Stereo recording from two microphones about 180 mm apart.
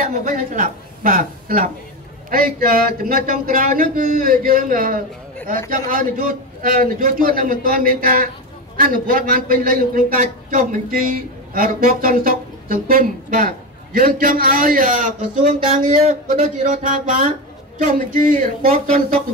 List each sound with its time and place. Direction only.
0.0 s a woman's voice: 45° right (ahead or behind)